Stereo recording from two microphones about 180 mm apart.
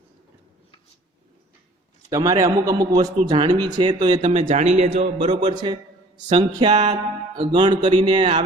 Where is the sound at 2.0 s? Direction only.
20° right (ahead or behind).